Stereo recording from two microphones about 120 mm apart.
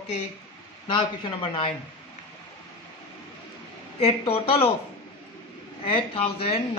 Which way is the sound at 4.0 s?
55° left (ahead or behind).